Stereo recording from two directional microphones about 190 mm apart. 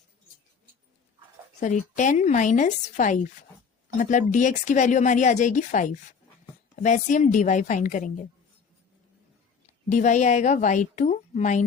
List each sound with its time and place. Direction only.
1.6 s speech: 40° left (ahead or behind)
9.9 s speech: 40° left (ahead or behind)